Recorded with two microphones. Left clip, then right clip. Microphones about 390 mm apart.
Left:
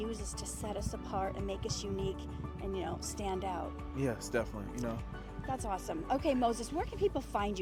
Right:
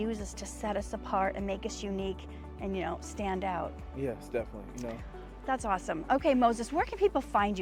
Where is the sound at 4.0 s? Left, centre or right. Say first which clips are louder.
Right 1 dB; left.